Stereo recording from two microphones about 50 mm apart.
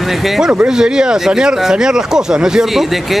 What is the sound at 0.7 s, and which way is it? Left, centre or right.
A man's voice, centre.